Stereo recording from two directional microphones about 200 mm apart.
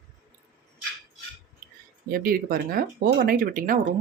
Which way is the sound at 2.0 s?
45° right (ahead or behind).